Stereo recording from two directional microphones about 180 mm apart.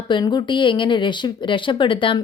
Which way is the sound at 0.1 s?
25° left (ahead or behind).